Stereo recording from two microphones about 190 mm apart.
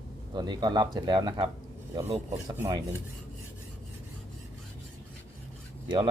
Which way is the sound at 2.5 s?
15° right (ahead or behind).